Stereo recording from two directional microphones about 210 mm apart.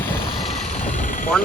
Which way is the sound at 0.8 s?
40° left (ahead or behind).